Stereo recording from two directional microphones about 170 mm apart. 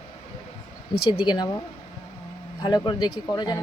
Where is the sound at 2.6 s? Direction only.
25° left (ahead or behind).